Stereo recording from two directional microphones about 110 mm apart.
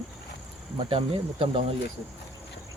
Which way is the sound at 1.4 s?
60° right (ahead or behind).